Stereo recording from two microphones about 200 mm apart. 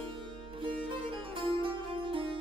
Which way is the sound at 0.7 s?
25° right (ahead or behind).